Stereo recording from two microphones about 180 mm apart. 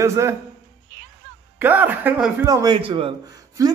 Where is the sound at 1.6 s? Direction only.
10° right (ahead or behind).